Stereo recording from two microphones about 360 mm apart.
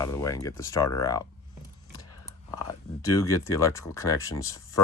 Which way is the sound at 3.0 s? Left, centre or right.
Centre.